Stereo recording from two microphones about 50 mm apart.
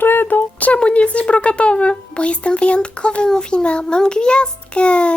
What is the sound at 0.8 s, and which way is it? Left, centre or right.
A child's voice, left.